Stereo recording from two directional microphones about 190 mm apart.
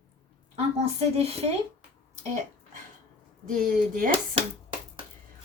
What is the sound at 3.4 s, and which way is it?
Chopping, 50° right (ahead or behind).